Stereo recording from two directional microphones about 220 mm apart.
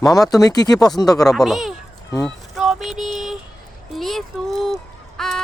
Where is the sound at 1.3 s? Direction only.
Centre (ahead or behind).